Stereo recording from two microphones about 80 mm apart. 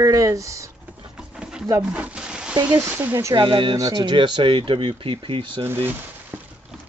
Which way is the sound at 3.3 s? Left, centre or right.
Right.